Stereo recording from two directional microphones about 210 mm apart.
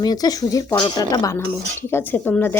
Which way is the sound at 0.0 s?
20° left (ahead or behind).